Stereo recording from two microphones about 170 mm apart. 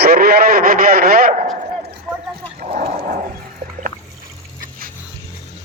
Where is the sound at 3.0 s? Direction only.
55° right (ahead or behind).